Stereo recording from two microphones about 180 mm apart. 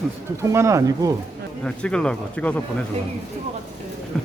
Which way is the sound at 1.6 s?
5° left (ahead or behind).